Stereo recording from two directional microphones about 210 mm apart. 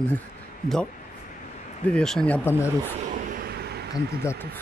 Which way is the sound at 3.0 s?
45° right (ahead or behind).